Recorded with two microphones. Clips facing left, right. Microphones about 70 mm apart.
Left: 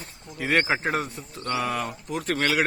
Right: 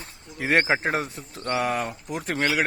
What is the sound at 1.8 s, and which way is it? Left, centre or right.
Speech, centre.